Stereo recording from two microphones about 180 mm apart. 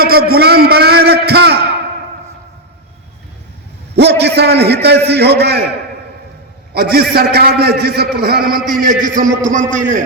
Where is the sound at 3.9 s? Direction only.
70° right (ahead or behind).